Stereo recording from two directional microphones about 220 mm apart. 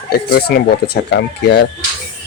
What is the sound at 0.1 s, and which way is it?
Speech, 45° left (ahead or behind).